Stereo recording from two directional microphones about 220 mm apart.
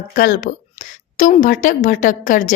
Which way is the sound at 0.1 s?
35° left (ahead or behind).